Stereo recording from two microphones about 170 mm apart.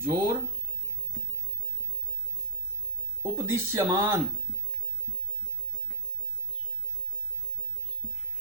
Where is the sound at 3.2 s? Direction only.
15° right (ahead or behind).